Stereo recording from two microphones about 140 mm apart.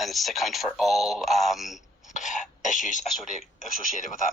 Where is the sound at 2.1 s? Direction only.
65° left (ahead or behind).